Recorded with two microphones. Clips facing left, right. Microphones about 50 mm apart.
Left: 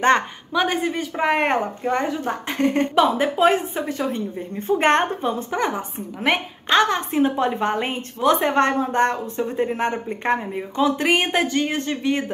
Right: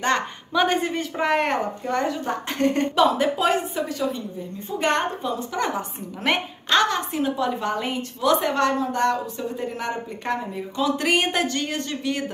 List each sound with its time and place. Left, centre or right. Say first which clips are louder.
0.5 s speech: even; centre
1.2 s a woman's voice: left 2 dB; left
2.2 s a woman's voice: left 1 dB; centre; by 5.6 s left
5.6 s a woman's voice: left 2 dB; centre
6.8 s a woman's voice: left 6 dB; left